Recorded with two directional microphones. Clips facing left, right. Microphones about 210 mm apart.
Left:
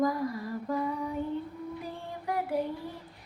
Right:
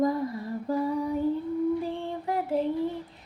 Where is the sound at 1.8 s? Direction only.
25° right (ahead or behind).